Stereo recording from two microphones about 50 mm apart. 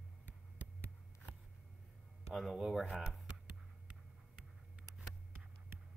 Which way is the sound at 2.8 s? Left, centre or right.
Right.